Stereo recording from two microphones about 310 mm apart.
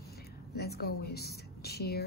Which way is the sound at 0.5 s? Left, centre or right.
Left.